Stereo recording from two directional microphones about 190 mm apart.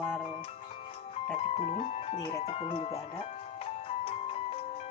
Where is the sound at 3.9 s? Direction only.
30° left (ahead or behind).